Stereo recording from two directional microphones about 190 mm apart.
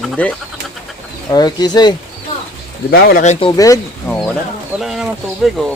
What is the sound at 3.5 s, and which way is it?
Speech, 20° left (ahead or behind).